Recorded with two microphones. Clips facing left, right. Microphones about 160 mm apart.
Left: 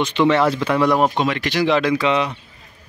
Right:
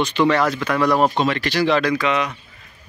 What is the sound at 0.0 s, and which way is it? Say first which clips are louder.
Speech: left 1 dB; 20° left (ahead or behind).